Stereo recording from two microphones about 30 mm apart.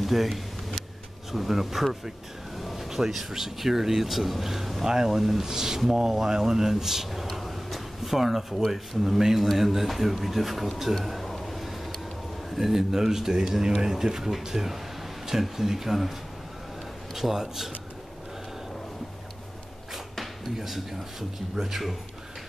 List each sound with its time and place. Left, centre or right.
0.0 s speech: centre
4.8 s speech: centre
7.1 s a sound: centre
8.1 s speech: centre
11.1 s a sound: centre
12.5 s speech: centre
17.3 s speech: centre
20.5 s speech: centre